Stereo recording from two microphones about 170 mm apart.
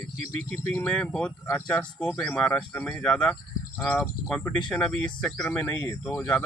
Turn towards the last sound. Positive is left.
turn(degrees=10)  # may be behind; listen again after turning